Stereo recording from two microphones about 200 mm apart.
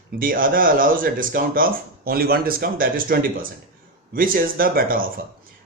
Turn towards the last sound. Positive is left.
turn(degrees=-45)  # may be behind; listen again after turning